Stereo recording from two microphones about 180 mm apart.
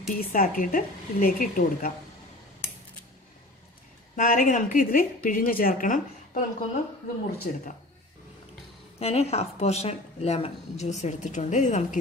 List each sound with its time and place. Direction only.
0.2 s speech: 50° left (ahead or behind)
4.2 s speech: 45° left (ahead or behind)
9.0 s a woman's voice: 35° left (ahead or behind)